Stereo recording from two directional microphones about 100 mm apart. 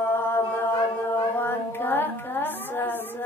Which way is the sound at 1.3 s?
20° left (ahead or behind).